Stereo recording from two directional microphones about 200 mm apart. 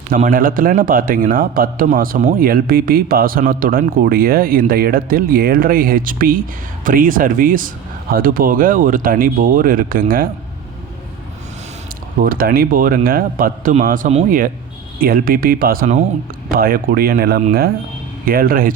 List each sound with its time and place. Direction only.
0.1 s a man's voice: 45° right (ahead or behind)
12.2 s a man's voice: 45° right (ahead or behind)